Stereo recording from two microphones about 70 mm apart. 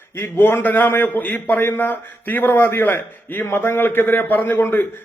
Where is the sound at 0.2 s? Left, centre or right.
Left.